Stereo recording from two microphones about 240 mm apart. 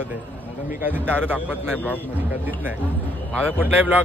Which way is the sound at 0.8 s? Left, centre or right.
Centre.